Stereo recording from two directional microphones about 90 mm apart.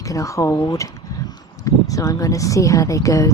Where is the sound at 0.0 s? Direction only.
35° left (ahead or behind).